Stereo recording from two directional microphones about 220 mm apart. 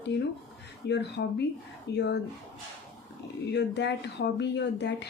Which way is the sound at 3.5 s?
50° left (ahead or behind).